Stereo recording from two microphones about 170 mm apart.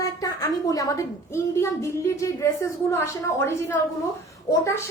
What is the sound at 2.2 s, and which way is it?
A woman's voice, 20° left (ahead or behind).